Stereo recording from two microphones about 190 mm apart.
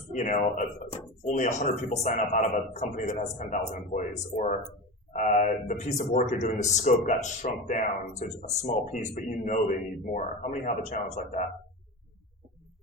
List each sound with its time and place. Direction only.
0.1 s a man's voice: 40° left (ahead or behind)